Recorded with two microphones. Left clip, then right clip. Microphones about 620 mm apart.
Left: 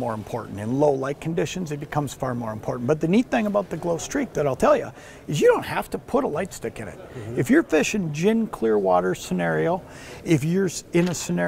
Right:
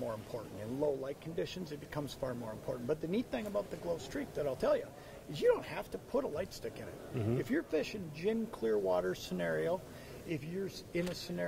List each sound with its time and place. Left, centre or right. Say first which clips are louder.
0.7 s speech: left 15 dB; left
10.2 s speech: left 18 dB; left